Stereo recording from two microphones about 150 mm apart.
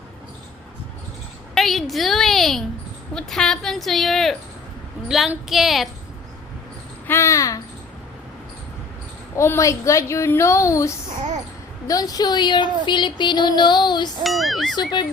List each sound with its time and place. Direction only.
1.5 s a sound: centre (ahead or behind)
3.2 s a woman's voice: 5° left (ahead or behind)
7.1 s a woman's voice: 20° left (ahead or behind)
9.3 s a woman's voice: 20° left (ahead or behind)
14.3 s a woman's voice: centre (ahead or behind)
15.0 s speech: 30° left (ahead or behind)